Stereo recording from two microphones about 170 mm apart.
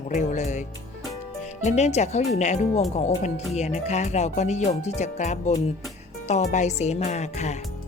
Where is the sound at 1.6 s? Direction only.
40° left (ahead or behind).